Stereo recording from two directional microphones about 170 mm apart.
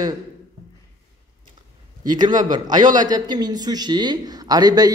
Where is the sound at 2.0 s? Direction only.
25° right (ahead or behind).